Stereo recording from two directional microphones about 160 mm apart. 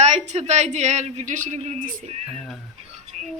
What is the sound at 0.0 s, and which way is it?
Speech, 45° right (ahead or behind).